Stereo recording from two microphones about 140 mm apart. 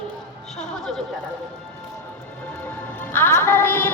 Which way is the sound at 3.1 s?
15° left (ahead or behind).